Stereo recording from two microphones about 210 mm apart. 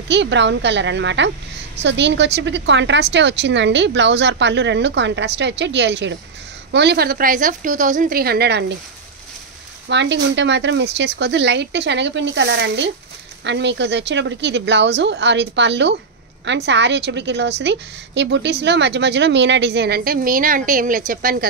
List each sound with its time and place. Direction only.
0.1 s a woman's voice: 55° right (ahead or behind)
9.8 s a woman's voice: 55° right (ahead or behind)